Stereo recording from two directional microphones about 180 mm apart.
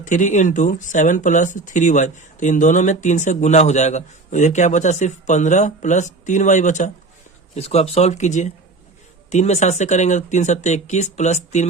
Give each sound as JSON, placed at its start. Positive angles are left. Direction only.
{"t": 0.0, "sound": "speech", "side_deg": 45}